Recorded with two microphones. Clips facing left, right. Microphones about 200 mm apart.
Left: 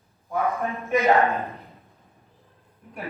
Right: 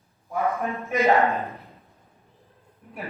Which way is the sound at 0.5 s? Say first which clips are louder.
Left 1 dB; centre (ahead or behind).